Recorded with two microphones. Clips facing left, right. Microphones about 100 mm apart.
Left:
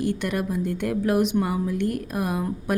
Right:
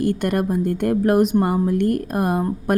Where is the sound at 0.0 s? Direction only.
50° right (ahead or behind).